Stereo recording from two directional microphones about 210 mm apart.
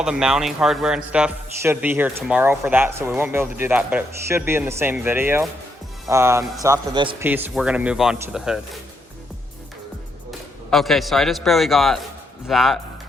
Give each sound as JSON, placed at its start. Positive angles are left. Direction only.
{"t": 0.0, "sound": "a man's voice", "side_deg": -5}
{"t": 7.2, "sound": "speech", "side_deg": -10}
{"t": 10.7, "sound": "speech", "side_deg": 0}